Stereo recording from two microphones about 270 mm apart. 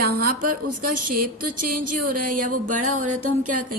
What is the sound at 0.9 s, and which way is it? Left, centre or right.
Music, right.